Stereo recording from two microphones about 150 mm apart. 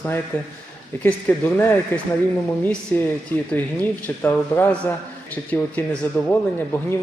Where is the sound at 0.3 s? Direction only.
15° left (ahead or behind).